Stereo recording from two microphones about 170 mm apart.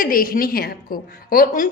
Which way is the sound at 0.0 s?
55° left (ahead or behind).